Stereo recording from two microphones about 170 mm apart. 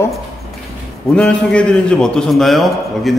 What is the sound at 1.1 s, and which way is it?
A man's voice, 5° left (ahead or behind).